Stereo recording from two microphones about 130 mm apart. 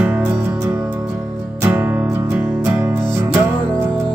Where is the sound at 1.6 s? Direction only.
15° right (ahead or behind).